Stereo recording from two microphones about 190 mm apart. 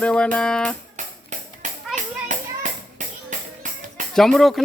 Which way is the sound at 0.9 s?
40° right (ahead or behind).